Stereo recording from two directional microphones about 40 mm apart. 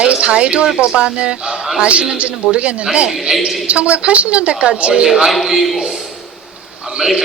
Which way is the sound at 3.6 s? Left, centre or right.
Right.